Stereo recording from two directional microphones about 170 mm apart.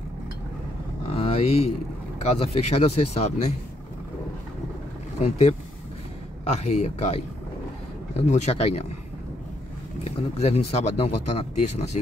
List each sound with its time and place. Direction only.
1.0 s a sound: 35° left (ahead or behind)
2.2 s speech: 35° left (ahead or behind)
5.2 s speech: 40° left (ahead or behind)
10.0 s speech: 35° left (ahead or behind)